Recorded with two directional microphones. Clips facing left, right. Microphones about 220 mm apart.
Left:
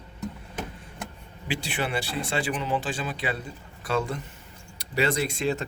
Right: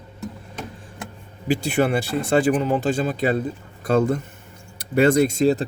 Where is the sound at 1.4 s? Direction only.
45° right (ahead or behind).